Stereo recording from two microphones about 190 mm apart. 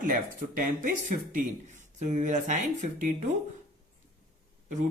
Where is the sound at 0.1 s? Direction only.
45° right (ahead or behind).